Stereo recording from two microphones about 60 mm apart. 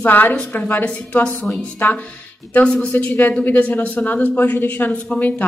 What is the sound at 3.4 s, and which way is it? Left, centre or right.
A woman's voice, left.